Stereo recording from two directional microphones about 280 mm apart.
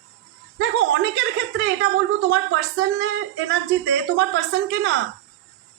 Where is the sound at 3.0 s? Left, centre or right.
Right.